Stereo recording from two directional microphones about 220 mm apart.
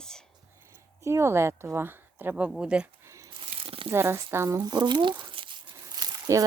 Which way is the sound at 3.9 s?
10° right (ahead or behind).